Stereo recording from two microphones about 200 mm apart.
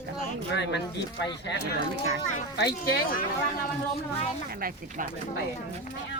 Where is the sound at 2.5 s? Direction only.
45° left (ahead or behind).